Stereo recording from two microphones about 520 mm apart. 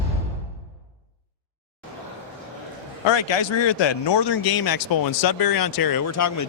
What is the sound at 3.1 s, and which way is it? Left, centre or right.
Speech, left.